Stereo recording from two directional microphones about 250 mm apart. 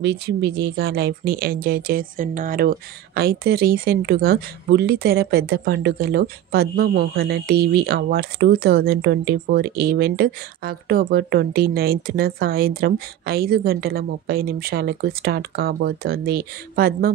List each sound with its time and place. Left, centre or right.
0.0 s speech: right